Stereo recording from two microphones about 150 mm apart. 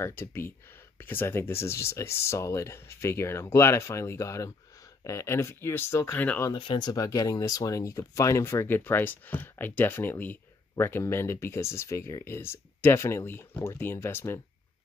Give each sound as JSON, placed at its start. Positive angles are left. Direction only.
{"t": 0.0, "sound": "speech", "side_deg": 15}
{"t": 6.5, "sound": "speech", "side_deg": 30}